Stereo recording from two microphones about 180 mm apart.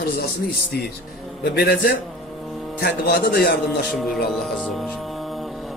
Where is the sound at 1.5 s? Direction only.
60° left (ahead or behind).